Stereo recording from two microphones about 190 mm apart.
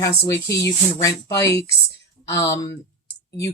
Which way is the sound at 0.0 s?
15° left (ahead or behind).